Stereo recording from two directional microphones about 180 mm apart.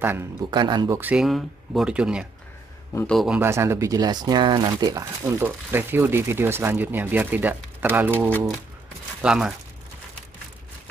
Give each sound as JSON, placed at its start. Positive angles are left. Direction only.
{"t": 0.0, "sound": "speech", "side_deg": -10}
{"t": 0.5, "sound": "speech", "side_deg": -25}
{"t": 0.9, "sound": "speech", "side_deg": -5}
{"t": 3.3, "sound": "speech", "side_deg": -15}